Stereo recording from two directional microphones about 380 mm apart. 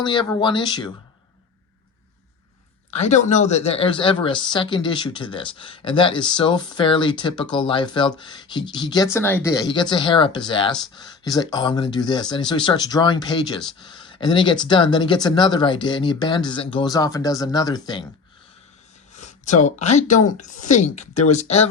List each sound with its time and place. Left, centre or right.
0.0 s speech: centre
2.9 s speech: centre
19.1 s a sound: centre
20.0 s speech: centre